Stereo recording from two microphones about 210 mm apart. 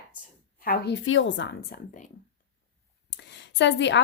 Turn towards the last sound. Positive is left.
turn(degrees=60)  # may be behind; listen again after turning